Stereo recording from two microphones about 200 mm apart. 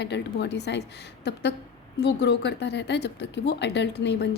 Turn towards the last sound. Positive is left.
turn(degrees=55)  # may be behind; listen again after turning